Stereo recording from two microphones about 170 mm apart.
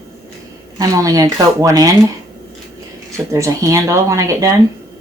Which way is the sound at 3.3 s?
20° right (ahead or behind).